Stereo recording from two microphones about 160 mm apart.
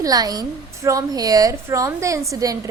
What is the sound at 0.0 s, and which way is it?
A woman's voice, 25° right (ahead or behind).